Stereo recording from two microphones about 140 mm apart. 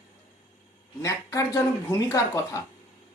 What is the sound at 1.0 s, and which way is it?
Speech, 20° left (ahead or behind).